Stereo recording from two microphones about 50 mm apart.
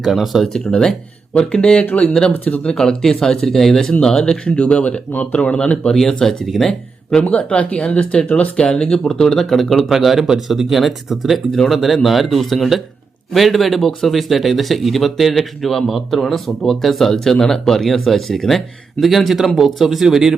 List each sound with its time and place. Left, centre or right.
0.0 s speech: centre
0.6 s speech: centre
1.8 s speech: left
2.7 s speech: centre
7.3 s speech: left
8.6 s speech: centre